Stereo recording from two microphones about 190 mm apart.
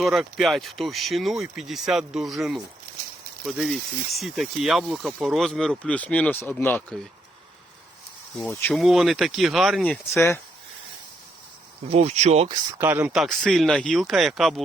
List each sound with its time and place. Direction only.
0.0 s speech: centre (ahead or behind)
8.4 s speech: 5° left (ahead or behind)
10.2 s speech: 15° left (ahead or behind)
11.9 s speech: 35° right (ahead or behind)
12.8 s speech: 10° right (ahead or behind)